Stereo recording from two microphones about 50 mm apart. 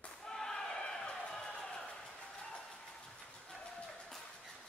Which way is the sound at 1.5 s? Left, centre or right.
Left.